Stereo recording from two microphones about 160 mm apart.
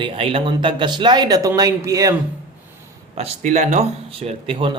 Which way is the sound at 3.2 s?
45° right (ahead or behind).